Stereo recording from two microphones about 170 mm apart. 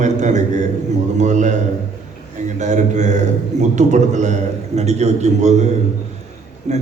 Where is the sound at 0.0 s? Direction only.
45° right (ahead or behind).